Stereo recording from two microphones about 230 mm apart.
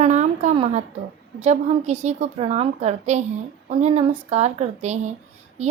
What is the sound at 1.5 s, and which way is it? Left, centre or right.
A woman's voice, right.